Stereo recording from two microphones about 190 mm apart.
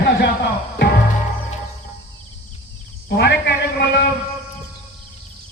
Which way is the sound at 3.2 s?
60° left (ahead or behind).